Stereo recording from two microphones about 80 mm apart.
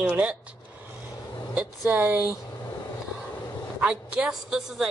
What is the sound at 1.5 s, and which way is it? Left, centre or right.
Speech, right.